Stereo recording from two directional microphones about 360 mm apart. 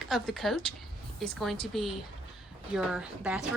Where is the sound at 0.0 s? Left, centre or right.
Centre.